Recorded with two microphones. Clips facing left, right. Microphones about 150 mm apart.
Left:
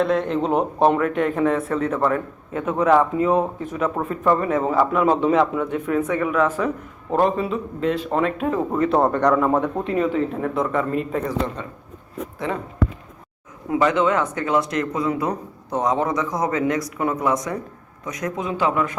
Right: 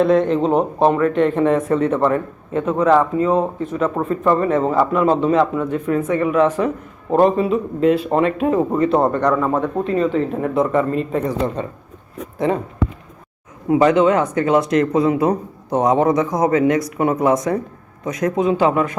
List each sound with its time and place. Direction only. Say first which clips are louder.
0.0 s a man's voice: right 5 dB; centre (ahead or behind)
9.3 s a man's voice: right 1 dB; 10° left (ahead or behind)
13.7 s a man's voice: right 5 dB; 15° right (ahead or behind)
18.6 s a man's voice: right 2 dB; 25° right (ahead or behind)